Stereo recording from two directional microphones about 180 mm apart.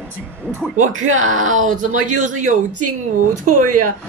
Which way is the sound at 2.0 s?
45° right (ahead or behind).